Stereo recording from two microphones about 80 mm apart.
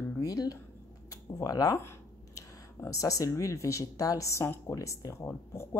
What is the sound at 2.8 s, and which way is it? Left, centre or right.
Speech, left.